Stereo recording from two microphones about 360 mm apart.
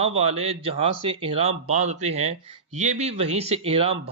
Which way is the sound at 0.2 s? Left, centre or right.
Centre.